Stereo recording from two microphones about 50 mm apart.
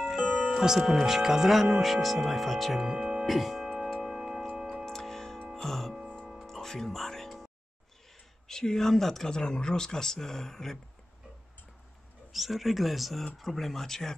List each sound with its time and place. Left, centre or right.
0.0 s music: centre
0.5 s speech: centre
2.9 s music: centre
3.3 s music: centre
3.6 s clock: centre
4.8 s music: centre
8.5 s speech: centre
12.3 s speech: centre